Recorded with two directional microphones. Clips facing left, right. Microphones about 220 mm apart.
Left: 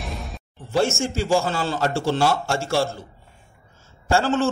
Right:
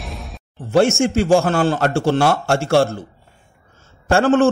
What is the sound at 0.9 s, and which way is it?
A man's voice, 55° right (ahead or behind).